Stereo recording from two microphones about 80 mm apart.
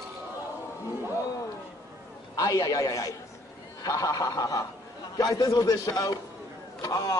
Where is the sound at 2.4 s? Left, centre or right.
Left.